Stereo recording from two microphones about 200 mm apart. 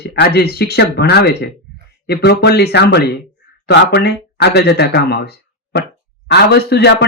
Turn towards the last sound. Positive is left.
turn(degrees=55)  # may be behind; listen again after turning